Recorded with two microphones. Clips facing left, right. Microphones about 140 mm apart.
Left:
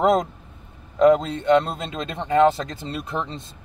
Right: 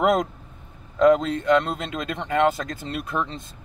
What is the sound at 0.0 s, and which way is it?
Speech, 25° left (ahead or behind).